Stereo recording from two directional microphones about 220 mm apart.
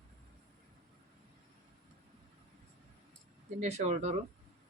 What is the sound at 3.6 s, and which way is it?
Speech, 30° right (ahead or behind).